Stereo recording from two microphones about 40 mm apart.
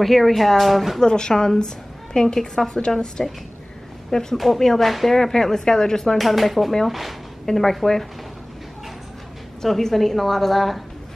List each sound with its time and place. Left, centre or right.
0.0 s a woman's voice: centre
1.0 s a woman's voice: centre
6.1 s a woman's voice: centre
7.4 s speech: centre
9.6 s a woman's voice: centre